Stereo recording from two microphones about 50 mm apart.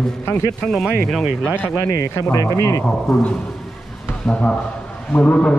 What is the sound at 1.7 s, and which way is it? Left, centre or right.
Speech, left.